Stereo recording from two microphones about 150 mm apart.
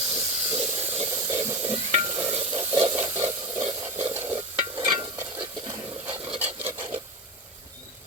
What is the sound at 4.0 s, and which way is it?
Stir, 20° right (ahead or behind).